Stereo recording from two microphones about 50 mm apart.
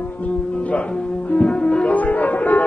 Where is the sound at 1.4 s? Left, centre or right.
Left.